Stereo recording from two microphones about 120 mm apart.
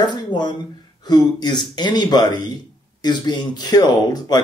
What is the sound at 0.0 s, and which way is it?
Speech, 40° left (ahead or behind).